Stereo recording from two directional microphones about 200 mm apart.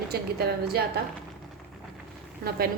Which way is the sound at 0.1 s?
50° right (ahead or behind).